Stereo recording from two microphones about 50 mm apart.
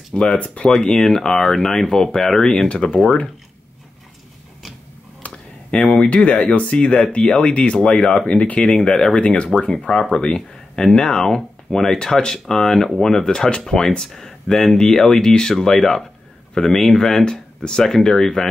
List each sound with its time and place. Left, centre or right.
0.1 s speech: centre
2.7 s speech: left
5.2 s a sound: left
5.7 s speech: left